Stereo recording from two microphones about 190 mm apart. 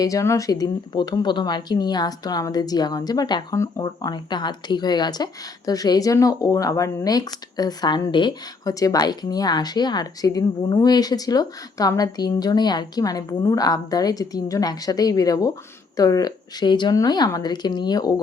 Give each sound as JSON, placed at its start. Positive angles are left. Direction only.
{"t": 0.0, "sound": "speech", "side_deg": 15}